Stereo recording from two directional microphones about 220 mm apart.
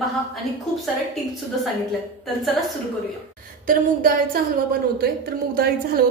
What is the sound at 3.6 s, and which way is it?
A woman's voice, 40° right (ahead or behind).